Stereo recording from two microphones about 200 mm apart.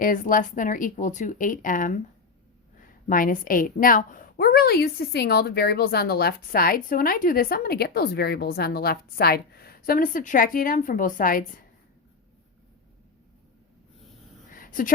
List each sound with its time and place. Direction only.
0.0 s a woman's voice: 40° left (ahead or behind)
3.1 s a woman's voice: 45° left (ahead or behind)
14.5 s a sound: 45° left (ahead or behind)